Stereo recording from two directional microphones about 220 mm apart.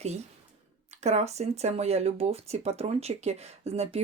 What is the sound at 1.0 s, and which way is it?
Speech, 30° right (ahead or behind).